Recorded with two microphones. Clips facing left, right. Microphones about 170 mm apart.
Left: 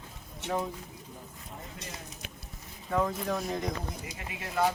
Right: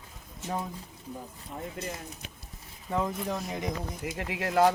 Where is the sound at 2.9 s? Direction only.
20° right (ahead or behind).